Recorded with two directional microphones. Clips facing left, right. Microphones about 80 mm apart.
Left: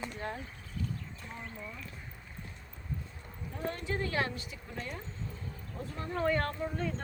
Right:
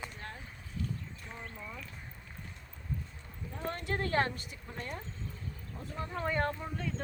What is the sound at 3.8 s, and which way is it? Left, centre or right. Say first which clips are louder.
A woman's voice: right 3 dB; right.